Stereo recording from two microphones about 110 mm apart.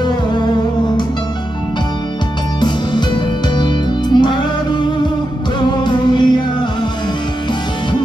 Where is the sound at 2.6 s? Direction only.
45° left (ahead or behind).